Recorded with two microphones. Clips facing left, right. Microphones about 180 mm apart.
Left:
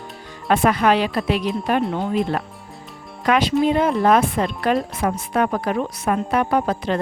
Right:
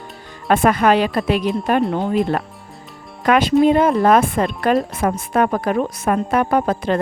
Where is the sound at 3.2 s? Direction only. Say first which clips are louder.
Right 4 dB; 50° right (ahead or behind).